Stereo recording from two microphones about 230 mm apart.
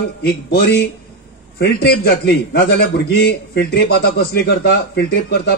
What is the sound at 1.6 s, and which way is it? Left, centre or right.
A man's voice, left.